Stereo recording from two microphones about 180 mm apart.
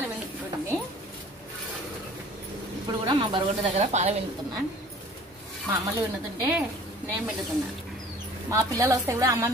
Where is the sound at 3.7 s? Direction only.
35° right (ahead or behind).